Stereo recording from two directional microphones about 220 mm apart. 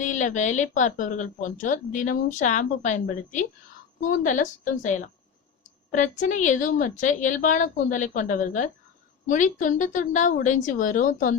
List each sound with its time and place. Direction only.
0.0 s speech: 35° left (ahead or behind)